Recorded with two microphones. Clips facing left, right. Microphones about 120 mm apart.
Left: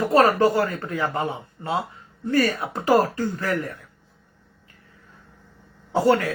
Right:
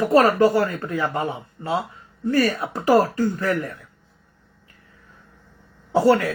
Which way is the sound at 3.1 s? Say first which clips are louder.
Right 3 dB; 30° right (ahead or behind).